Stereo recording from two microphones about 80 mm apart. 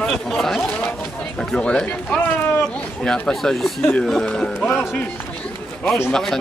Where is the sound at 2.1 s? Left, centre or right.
Left.